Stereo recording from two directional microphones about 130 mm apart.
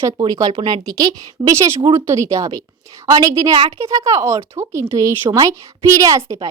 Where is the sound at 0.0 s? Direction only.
30° right (ahead or behind).